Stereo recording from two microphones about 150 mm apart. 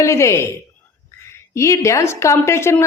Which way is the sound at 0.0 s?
20° left (ahead or behind).